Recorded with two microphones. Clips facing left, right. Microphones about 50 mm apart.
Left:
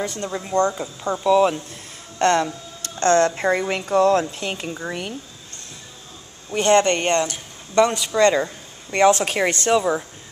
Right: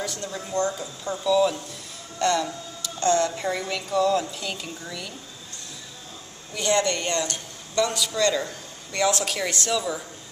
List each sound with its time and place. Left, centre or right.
0.0 s speech: left
6.5 s speech: left